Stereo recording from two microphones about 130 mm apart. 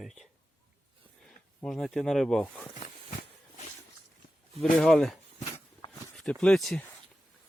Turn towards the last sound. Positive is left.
turn(degrees=5)  # may be behind; listen again after turning